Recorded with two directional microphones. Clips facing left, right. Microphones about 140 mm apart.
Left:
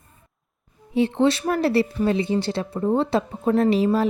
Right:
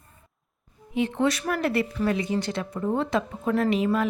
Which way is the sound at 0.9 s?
30° left (ahead or behind).